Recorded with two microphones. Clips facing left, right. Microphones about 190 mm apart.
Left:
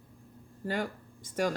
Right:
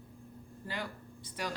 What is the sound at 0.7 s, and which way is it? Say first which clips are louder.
Speech: left 8 dB; 45° left (ahead or behind).